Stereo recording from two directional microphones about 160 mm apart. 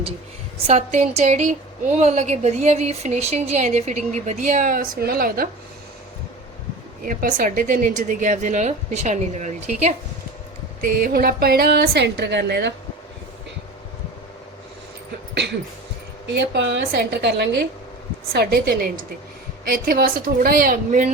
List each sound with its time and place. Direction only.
0.7 s a woman's voice: 45° right (ahead or behind); by 5.5 s 65° right (ahead or behind)
7.0 s a woman's voice: 60° right (ahead or behind)
10.8 s a woman's voice: 60° right (ahead or behind); by 12.7 s 90° right
16.2 s a woman's voice: 90° right; by 21.1 s 55° right (ahead or behind)